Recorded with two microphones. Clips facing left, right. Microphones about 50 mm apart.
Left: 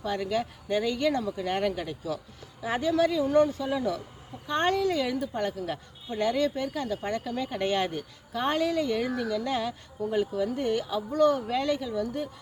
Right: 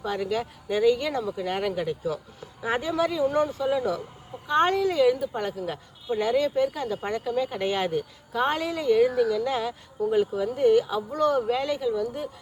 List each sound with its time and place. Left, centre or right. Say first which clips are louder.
0.0 s a woman's voice: right 1 dB; centre
2.6 s a woman's voice: even; centre